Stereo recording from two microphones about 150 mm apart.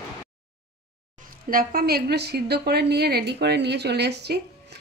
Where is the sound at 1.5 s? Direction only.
70° right (ahead or behind).